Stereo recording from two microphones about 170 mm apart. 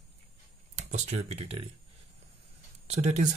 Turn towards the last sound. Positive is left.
turn(degrees=-40)  # may be behind; listen again after turning